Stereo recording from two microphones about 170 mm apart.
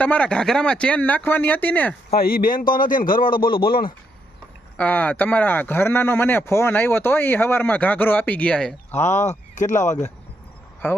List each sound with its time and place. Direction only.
0.0 s speech: 5° left (ahead or behind)
2.1 s a man's voice: 60° left (ahead or behind)
4.8 s speech: 10° left (ahead or behind)
9.1 s speech: 45° left (ahead or behind)